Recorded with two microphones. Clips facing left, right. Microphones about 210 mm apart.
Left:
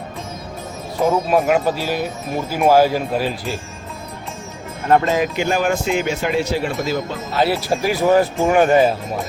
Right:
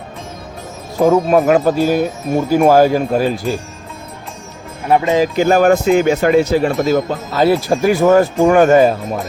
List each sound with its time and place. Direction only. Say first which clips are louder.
1.0 s speech: right 5 dB; 45° right (ahead or behind)
4.9 s speech: right 1 dB; 10° right (ahead or behind)
5.4 s speech: right 8 dB; 40° right (ahead or behind)